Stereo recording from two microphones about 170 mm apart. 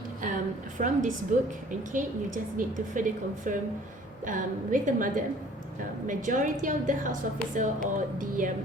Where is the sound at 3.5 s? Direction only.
50° right (ahead or behind).